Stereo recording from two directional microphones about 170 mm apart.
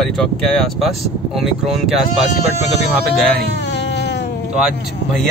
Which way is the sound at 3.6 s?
90° left.